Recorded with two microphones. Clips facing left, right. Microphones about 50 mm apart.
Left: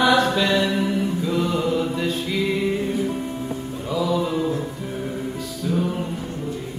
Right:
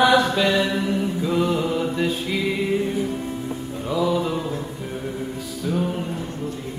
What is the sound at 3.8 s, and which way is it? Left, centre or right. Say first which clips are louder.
Music: right 1 dB; centre.